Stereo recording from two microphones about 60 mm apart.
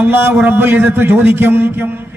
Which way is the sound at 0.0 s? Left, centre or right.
Right.